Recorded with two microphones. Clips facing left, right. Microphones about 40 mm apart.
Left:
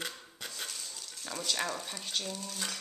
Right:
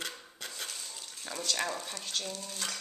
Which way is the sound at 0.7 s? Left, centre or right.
Centre.